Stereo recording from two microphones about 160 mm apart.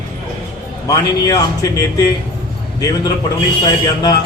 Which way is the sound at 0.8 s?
20° left (ahead or behind).